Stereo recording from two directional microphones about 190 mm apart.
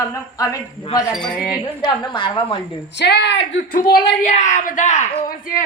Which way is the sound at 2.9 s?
65° left (ahead or behind).